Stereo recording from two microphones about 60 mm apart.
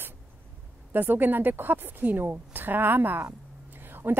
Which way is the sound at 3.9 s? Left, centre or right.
Right.